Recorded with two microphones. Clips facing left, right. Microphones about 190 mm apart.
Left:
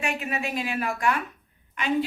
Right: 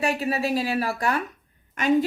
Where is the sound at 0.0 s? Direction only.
35° right (ahead or behind).